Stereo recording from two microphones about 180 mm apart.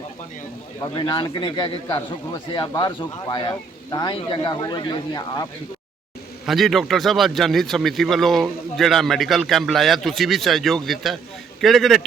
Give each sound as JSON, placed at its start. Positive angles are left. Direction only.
{"t": 0.8, "sound": "a man's voice", "side_deg": 25}
{"t": 6.4, "sound": "speech", "side_deg": 0}